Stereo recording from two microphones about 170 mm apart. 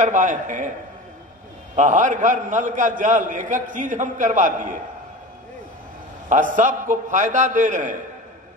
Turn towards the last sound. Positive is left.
turn(degrees=-50)  # may be behind; listen again after turning